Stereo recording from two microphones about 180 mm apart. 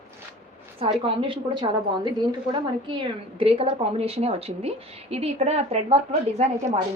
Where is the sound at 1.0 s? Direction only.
25° right (ahead or behind).